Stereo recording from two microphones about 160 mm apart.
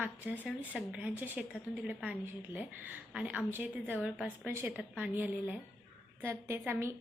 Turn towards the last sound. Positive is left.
turn(degrees=-15)  # may be behind; listen again after turning